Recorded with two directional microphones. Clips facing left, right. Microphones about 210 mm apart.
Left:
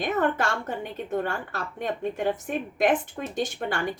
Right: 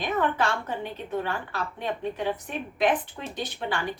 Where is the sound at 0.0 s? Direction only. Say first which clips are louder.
Left 1 dB; 45° left (ahead or behind).